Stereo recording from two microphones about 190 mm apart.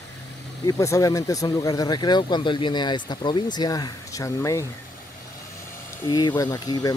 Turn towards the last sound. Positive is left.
turn(degrees=20)  # may be behind; listen again after turning